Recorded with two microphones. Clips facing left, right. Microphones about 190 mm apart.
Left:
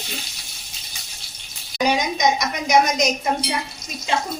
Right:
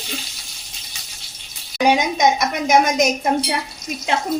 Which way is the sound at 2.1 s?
55° right (ahead or behind).